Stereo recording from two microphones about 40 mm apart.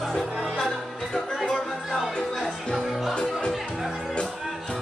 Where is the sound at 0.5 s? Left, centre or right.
Centre.